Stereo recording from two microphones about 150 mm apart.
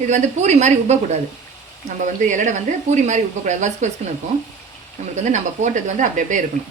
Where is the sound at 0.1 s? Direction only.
50° right (ahead or behind).